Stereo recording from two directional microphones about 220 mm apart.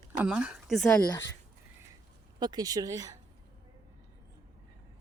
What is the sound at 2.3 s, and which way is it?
Speech, 20° right (ahead or behind).